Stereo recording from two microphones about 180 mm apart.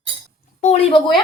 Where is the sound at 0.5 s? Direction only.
40° left (ahead or behind).